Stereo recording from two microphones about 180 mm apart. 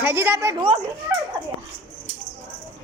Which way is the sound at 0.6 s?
30° right (ahead or behind).